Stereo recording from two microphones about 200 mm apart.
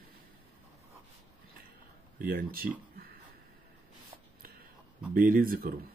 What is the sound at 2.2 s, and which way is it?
Speech, 45° right (ahead or behind).